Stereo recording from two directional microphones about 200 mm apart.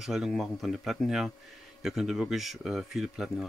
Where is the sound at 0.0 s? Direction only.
Centre (ahead or behind).